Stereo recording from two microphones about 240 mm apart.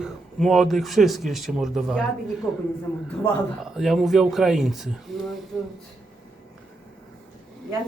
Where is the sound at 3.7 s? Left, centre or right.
Centre.